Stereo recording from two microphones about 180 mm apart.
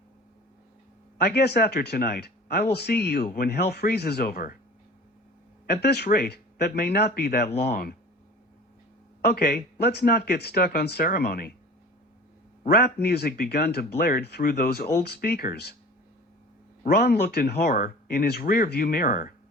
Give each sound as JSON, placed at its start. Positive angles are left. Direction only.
{"t": 1.2, "sound": "speech", "side_deg": 65}
{"t": 5.6, "sound": "speech", "side_deg": 60}
{"t": 9.2, "sound": "speech", "side_deg": 60}
{"t": 12.6, "sound": "speech", "side_deg": 60}
{"t": 16.8, "sound": "speech", "side_deg": 60}